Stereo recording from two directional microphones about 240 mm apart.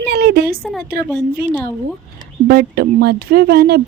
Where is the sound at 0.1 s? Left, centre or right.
Right.